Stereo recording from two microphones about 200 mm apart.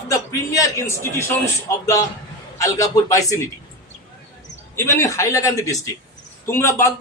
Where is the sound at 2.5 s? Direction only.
15° left (ahead or behind).